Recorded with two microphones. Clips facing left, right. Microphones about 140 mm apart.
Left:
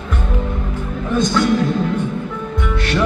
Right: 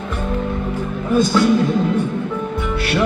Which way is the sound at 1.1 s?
5° right (ahead or behind).